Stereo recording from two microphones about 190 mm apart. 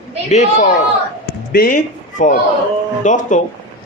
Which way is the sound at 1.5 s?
50° left (ahead or behind).